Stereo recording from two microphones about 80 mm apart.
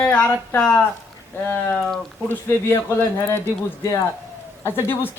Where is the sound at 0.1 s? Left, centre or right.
Centre.